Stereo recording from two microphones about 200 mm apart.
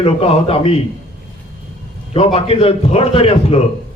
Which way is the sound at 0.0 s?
30° left (ahead or behind).